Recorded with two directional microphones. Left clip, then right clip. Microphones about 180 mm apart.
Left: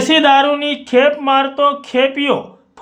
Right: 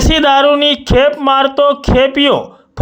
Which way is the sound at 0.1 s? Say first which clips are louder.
Right 2 dB; 50° right (ahead or behind).